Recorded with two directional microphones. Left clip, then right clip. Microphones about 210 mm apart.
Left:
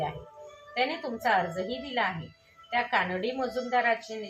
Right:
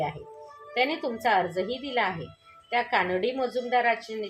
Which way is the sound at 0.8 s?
35° right (ahead or behind).